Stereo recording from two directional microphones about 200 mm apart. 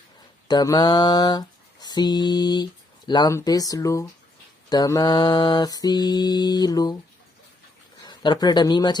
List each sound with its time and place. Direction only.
0.4 s a sound: 20° left (ahead or behind)
3.1 s speech: 20° left (ahead or behind)
4.7 s mantra: 20° left (ahead or behind)
8.0 s speech: 20° left (ahead or behind)